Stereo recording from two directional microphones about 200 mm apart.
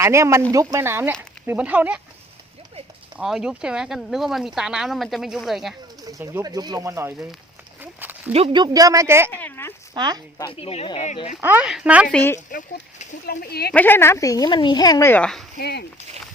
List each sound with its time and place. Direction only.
0.0 s speech: 15° right (ahead or behind)
3.2 s speech: 5° right (ahead or behind)
6.1 s speech: 15° right (ahead or behind)
7.8 s horse: 10° right (ahead or behind)
8.3 s speech: 25° right (ahead or behind)
9.3 s a sound: 10° left (ahead or behind)
9.9 s speech: 20° right (ahead or behind)
10.3 s speech: 25° left (ahead or behind)
11.3 s speech: 10° right (ahead or behind)
12.1 s speech: 10° left (ahead or behind)
12.5 s speech: 45° left (ahead or behind)
13.7 s speech: 10° left (ahead or behind)
15.5 s speech: 55° left (ahead or behind)